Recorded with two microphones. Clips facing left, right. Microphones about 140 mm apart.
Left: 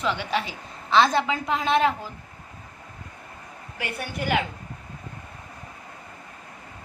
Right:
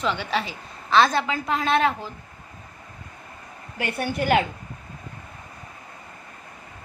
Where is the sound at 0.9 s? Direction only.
25° left (ahead or behind).